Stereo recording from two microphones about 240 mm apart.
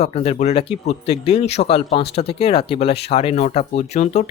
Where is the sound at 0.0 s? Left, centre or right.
Left.